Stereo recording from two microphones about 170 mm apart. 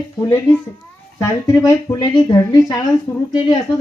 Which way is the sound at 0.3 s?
10° left (ahead or behind).